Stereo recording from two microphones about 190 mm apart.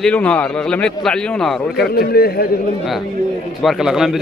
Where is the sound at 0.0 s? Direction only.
5° left (ahead or behind).